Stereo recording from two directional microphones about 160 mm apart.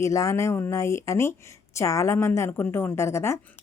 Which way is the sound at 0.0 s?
20° left (ahead or behind).